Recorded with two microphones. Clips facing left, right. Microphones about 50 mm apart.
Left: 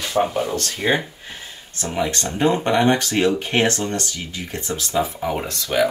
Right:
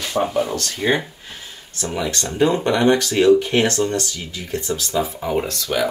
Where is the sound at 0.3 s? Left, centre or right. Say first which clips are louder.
Right 2 dB; centre.